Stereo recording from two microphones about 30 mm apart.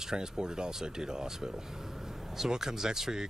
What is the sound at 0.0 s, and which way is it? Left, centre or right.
Speech, right.